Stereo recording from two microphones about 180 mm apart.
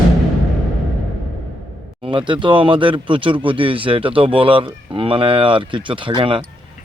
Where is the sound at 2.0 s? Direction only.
25° right (ahead or behind).